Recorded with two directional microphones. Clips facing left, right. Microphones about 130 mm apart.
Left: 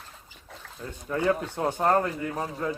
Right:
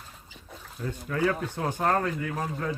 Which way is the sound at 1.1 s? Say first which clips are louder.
Left 2 dB; 25° left (ahead or behind).